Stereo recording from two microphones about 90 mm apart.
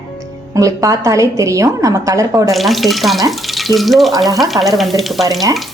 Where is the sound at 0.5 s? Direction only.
40° right (ahead or behind).